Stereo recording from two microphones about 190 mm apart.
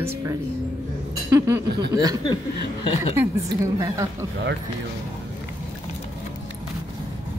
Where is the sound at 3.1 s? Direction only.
15° right (ahead or behind).